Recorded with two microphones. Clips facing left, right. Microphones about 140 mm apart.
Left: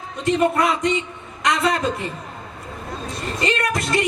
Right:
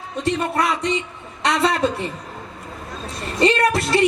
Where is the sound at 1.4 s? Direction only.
30° right (ahead or behind).